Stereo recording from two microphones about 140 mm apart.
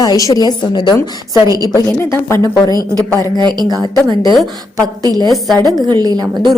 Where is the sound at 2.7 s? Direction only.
25° right (ahead or behind).